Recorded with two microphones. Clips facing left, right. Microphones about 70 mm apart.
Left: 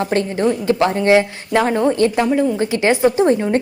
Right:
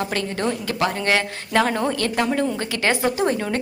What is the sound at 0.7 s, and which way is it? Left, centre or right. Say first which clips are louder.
A woman's voice: left 6 dB; left.